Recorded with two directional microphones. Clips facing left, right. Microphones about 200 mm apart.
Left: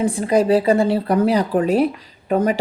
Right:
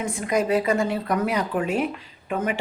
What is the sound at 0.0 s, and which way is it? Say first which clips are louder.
Speech: left 7 dB; 30° left (ahead or behind).